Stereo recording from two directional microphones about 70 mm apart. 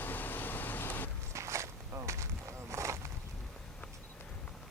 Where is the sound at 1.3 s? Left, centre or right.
Right.